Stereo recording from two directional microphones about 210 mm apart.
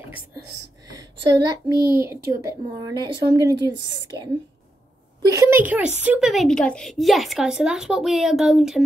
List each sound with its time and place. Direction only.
1.7 s a woman's voice: 15° right (ahead or behind)
5.3 s a woman's voice: 15° right (ahead or behind)